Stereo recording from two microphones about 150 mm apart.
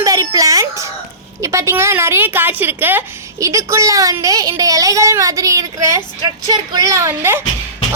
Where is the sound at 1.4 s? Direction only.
20° right (ahead or behind).